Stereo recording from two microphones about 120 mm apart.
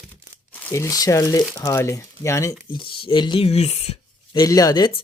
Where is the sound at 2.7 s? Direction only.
45° left (ahead or behind).